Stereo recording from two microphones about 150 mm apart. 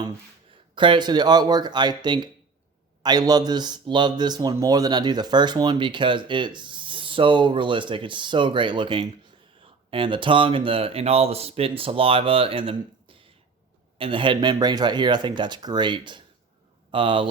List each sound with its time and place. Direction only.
0.8 s speech: 30° right (ahead or behind)